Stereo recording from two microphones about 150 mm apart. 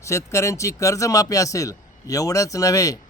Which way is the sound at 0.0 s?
20° left (ahead or behind).